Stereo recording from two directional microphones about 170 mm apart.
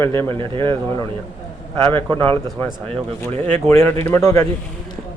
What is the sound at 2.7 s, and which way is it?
A man's voice, 35° right (ahead or behind).